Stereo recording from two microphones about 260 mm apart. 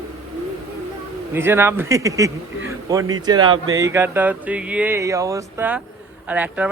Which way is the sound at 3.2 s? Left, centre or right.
Centre.